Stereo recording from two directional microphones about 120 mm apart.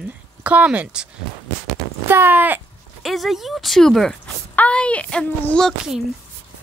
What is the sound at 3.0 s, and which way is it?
A woman's voice, centre (ahead or behind).